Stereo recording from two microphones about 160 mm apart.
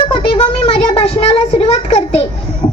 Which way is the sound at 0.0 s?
35° left (ahead or behind).